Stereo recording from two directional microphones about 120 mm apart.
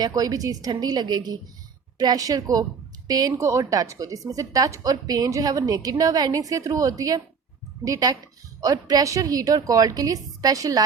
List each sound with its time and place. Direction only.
0.0 s a woman's voice: 30° right (ahead or behind)